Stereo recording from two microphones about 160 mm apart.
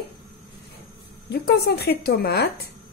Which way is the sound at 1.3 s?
90° left.